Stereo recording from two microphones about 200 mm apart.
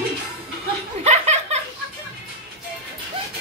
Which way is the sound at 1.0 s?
35° right (ahead or behind).